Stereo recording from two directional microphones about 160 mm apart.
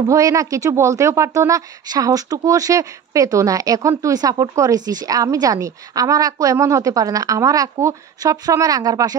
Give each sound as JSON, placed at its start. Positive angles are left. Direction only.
{"t": 0.1, "sound": "speech", "side_deg": -20}